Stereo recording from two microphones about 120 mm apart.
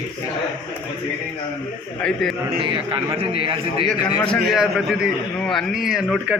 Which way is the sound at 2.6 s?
45° right (ahead or behind).